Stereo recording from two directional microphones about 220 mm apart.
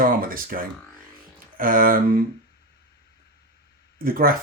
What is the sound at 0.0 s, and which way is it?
Speech, 40° right (ahead or behind).